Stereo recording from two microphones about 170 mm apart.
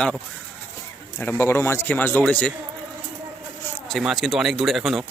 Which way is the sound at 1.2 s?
10° left (ahead or behind).